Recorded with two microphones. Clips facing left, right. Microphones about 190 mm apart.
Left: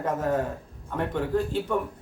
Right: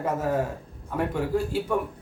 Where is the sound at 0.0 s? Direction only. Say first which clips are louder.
Even; 10° right (ahead or behind).